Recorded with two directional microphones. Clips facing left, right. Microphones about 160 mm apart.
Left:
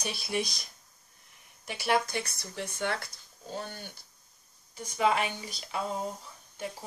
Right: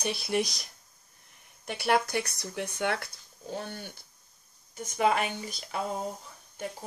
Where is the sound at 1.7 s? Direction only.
55° right (ahead or behind).